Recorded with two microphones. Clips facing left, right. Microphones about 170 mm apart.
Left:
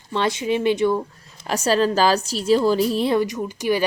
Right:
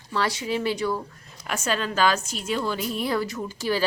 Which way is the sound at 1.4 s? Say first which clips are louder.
Left 8 dB; 35° left (ahead or behind).